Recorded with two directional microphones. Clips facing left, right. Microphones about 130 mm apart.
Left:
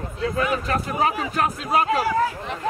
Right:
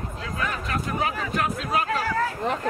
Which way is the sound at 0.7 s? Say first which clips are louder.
Left 4 dB; 40° left (ahead or behind).